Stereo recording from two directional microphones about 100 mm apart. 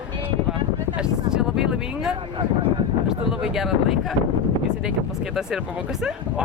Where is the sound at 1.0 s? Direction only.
5° right (ahead or behind).